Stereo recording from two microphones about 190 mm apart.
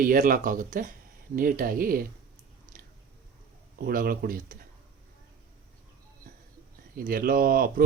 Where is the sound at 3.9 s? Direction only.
50° right (ahead or behind).